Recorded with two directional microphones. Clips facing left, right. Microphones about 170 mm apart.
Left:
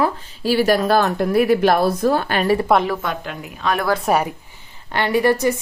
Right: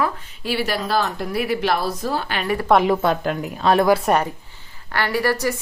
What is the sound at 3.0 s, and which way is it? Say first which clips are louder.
Speech: right 6 dB; 35° right (ahead or behind).